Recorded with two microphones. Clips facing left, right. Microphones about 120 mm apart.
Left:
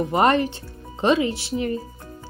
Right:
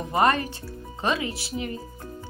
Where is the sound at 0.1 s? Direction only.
25° left (ahead or behind).